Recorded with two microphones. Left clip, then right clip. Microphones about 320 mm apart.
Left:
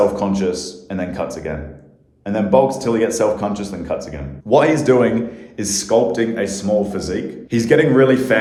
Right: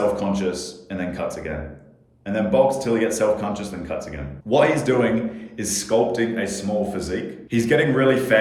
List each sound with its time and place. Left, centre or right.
0.2 s speech: centre